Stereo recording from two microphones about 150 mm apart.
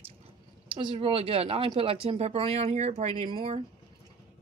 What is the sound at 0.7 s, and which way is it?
Speech, 35° right (ahead or behind).